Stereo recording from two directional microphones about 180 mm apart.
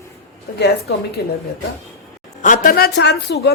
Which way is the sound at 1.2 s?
65° left (ahead or behind).